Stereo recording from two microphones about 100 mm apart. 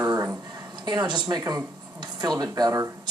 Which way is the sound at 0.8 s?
45° right (ahead or behind).